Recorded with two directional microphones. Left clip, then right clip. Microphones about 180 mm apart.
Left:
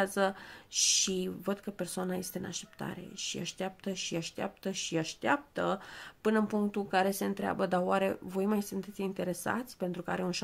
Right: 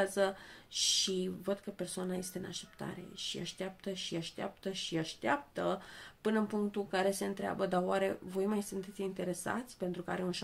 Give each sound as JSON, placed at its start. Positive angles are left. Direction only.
{"t": 0.0, "sound": "speech", "side_deg": 35}